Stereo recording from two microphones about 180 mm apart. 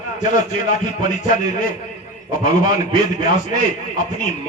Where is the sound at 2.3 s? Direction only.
50° left (ahead or behind).